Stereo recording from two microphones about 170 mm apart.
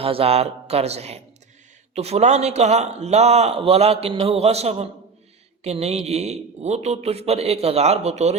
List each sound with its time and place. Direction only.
0.0 s a man's voice: 35° right (ahead or behind)